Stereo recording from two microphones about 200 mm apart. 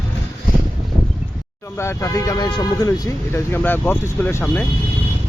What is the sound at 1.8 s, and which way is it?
Speech, 15° left (ahead or behind).